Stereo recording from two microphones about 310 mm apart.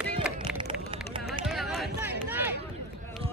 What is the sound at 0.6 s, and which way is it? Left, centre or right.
Vehicle, centre.